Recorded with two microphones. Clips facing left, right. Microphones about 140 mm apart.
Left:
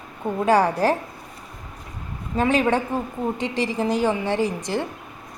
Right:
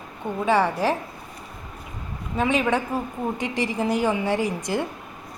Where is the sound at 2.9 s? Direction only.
15° right (ahead or behind).